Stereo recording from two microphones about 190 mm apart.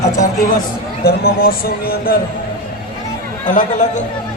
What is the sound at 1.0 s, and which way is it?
Speech, 50° left (ahead or behind).